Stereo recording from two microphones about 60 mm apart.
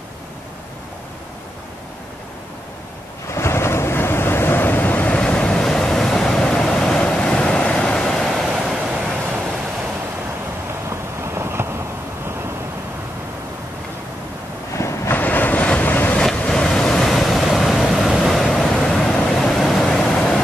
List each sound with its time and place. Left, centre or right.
3.3 s waves: left
5.1 s waves: centre
7.9 s vehicle: centre
10.9 s vehicle: right
14.8 s vehicle: left
15.1 s boat: left
16.3 s vehicle: centre
18.5 s waves: centre